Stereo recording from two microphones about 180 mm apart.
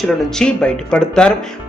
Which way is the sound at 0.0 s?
5° left (ahead or behind).